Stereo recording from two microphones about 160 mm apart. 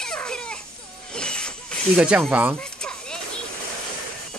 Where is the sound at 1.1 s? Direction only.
5° left (ahead or behind).